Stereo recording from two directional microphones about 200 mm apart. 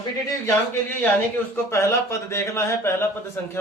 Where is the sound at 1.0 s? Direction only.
10° left (ahead or behind).